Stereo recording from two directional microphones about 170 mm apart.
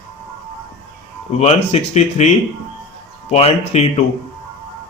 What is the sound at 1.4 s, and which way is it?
Speech, 40° left (ahead or behind).